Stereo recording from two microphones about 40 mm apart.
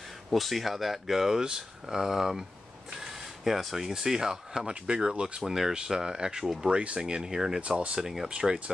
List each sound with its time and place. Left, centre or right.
0.3 s speech: centre
4.8 s speech: right
5.4 s speech: centre
7.6 s speech: right
8.0 s speech: centre
8.3 s speech: right